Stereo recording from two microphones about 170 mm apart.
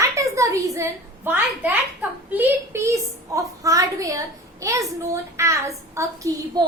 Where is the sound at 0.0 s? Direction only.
20° right (ahead or behind).